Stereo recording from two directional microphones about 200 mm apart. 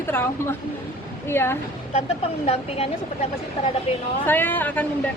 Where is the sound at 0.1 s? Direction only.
10° left (ahead or behind).